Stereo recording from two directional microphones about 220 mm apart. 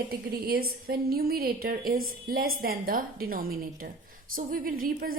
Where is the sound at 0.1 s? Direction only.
45° right (ahead or behind).